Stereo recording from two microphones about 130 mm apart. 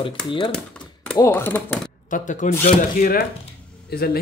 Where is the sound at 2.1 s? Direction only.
75° left (ahead or behind).